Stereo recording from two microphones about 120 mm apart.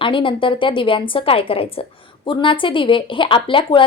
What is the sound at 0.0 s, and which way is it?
A woman's voice, 45° left (ahead or behind).